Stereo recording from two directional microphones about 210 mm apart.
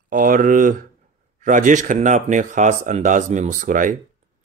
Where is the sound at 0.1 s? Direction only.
40° right (ahead or behind).